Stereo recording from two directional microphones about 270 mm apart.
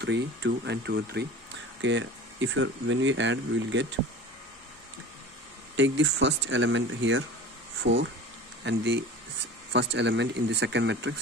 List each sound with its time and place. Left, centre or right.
0.0 s speech: right
5.8 s speech: right